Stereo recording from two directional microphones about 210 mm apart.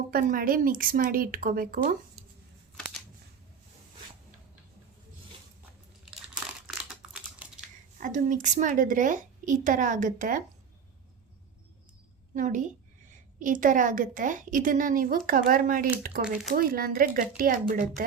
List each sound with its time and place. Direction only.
0.1 s a woman's voice: 40° right (ahead or behind)
6.7 s a sound: 5° right (ahead or behind)
7.9 s a woman's voice: 40° right (ahead or behind)
12.3 s a woman's voice: 35° right (ahead or behind)
16.2 s speech: 5° right (ahead or behind)
16.5 s a woman's voice: 45° right (ahead or behind)